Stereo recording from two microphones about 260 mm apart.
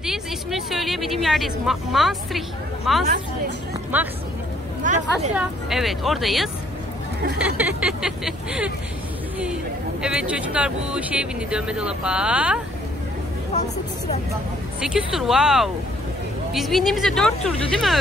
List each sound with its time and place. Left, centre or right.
0.0 s speech: centre
4.8 s speech: right
5.3 s speech: centre
10.0 s speech: centre
14.8 s speech: centre